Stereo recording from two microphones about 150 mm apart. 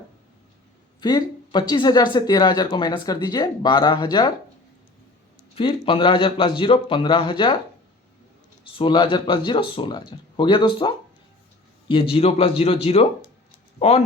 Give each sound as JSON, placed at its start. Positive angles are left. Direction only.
{"t": 1.0, "sound": "speech", "side_deg": 30}
{"t": 5.5, "sound": "speech", "side_deg": 35}
{"t": 8.6, "sound": "speech", "side_deg": 35}